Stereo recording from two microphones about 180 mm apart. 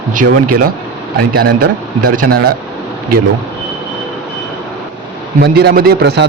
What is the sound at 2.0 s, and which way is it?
Speech, 55° right (ahead or behind).